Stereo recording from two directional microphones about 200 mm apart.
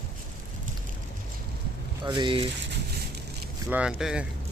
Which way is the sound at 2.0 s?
25° right (ahead or behind).